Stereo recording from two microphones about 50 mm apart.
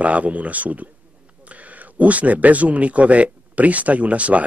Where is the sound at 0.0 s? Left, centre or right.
Right.